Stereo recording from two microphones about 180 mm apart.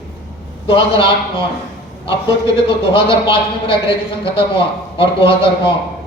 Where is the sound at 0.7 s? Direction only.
30° left (ahead or behind).